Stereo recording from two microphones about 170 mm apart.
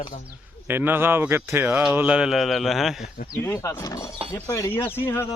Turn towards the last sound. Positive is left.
turn(degrees=15)  # may be behind; listen again after turning